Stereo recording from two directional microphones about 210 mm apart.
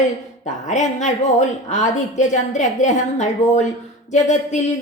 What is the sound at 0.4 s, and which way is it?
A woman's voice, 35° left (ahead or behind).